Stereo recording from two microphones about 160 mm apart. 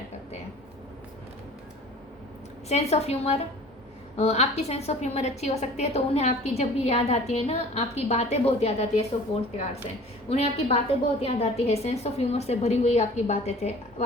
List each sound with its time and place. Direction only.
2.6 s a woman's voice: 40° left (ahead or behind)